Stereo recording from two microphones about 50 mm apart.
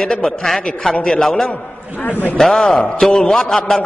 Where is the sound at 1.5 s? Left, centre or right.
Left.